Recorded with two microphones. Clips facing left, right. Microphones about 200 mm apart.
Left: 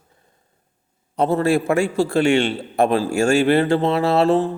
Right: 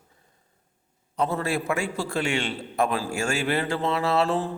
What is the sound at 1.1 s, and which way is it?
A man's voice, 25° left (ahead or behind).